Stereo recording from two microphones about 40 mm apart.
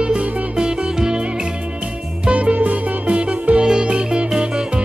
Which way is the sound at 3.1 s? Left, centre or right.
Right.